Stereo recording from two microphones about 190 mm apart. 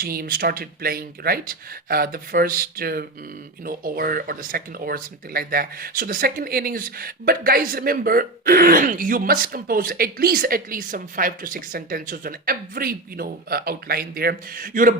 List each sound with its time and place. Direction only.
0.0 s speech: 50° right (ahead or behind)